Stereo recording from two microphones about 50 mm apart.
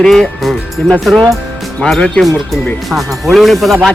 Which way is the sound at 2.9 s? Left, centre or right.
Centre.